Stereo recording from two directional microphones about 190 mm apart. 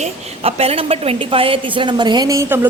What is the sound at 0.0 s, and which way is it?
A woman's voice, 35° right (ahead or behind).